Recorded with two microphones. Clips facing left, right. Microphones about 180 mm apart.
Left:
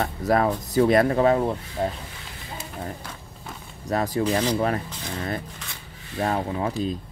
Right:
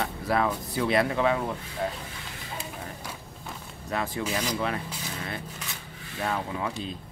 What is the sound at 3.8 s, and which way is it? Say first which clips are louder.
Speech: left 7 dB; 40° left (ahead or behind).